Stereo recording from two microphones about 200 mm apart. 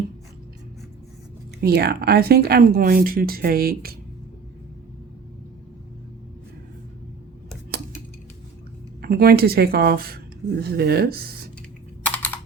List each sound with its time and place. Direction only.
1.6 s speech: 50° right (ahead or behind)
9.0 s speech: 50° right (ahead or behind)
12.0 s computer keyboard: 10° left (ahead or behind)